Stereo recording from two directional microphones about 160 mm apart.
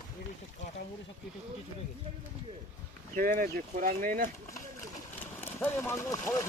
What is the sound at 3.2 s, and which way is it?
Speech, 60° right (ahead or behind).